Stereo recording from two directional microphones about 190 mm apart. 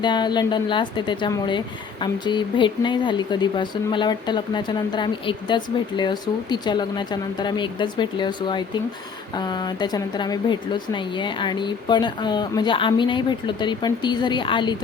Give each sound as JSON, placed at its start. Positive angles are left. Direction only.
{"t": 0.0, "sound": "speech", "side_deg": 25}